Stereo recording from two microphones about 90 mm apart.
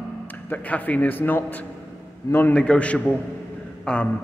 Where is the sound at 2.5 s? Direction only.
10° left (ahead or behind).